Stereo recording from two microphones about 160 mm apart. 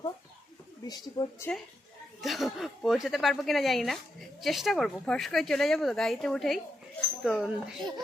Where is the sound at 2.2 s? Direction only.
Centre (ahead or behind).